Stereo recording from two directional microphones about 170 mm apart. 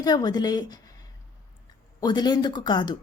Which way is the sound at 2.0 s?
25° left (ahead or behind).